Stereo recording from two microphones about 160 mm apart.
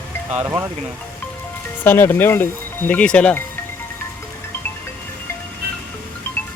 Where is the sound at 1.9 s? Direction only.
15° left (ahead or behind).